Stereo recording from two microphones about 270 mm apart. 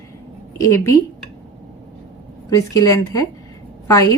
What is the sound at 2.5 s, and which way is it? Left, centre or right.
Speech, centre.